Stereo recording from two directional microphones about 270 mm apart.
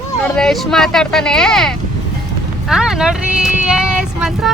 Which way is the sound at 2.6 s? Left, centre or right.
Centre.